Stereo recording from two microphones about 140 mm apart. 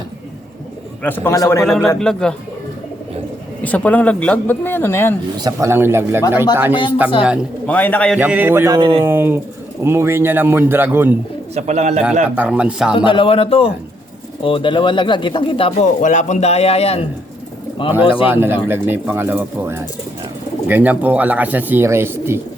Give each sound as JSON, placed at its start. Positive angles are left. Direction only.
{"t": 1.0, "sound": "speech", "side_deg": 15}
{"t": 1.6, "sound": "speech", "side_deg": 0}
{"t": 3.6, "sound": "speech", "side_deg": 10}
{"t": 5.4, "sound": "speech", "side_deg": -25}
{"t": 7.7, "sound": "speech", "side_deg": 10}
{"t": 8.2, "sound": "speech", "side_deg": -15}
{"t": 8.8, "sound": "speech", "side_deg": -40}
{"t": 9.0, "sound": "speech", "side_deg": -15}
{"t": 11.5, "sound": "speech", "side_deg": -50}
{"t": 12.5, "sound": "speech", "side_deg": -5}
{"t": 13.1, "sound": "speech", "side_deg": 40}
{"t": 15.8, "sound": "a man's voice", "side_deg": 60}
{"t": 18.3, "sound": "speech", "side_deg": -15}